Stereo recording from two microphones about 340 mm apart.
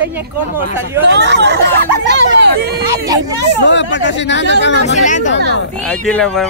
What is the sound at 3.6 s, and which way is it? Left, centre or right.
Speech, left.